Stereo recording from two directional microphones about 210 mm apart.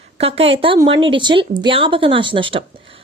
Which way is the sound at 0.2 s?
30° right (ahead or behind).